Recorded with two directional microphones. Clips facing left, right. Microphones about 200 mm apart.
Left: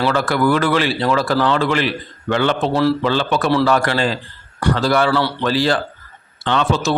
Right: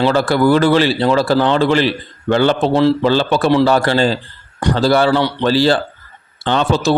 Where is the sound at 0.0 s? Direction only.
30° right (ahead or behind).